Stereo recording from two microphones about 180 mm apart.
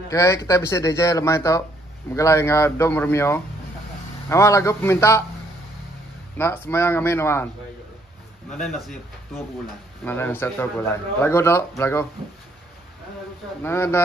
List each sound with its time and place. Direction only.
0.1 s speech: 15° left (ahead or behind)
6.3 s speech: 15° left (ahead or behind)
8.5 s speech: centre (ahead or behind)
13.6 s speech: 15° left (ahead or behind)